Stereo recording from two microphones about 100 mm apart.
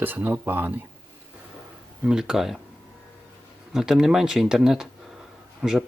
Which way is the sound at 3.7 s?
5° right (ahead or behind).